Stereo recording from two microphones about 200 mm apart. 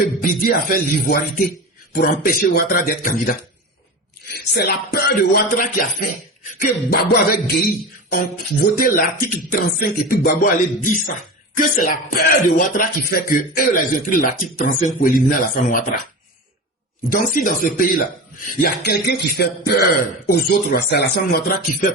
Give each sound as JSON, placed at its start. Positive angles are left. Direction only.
{"t": 0.0, "sound": "speech", "side_deg": 45}
{"t": 4.4, "sound": "speech", "side_deg": 50}
{"t": 17.1, "sound": "speech", "side_deg": 45}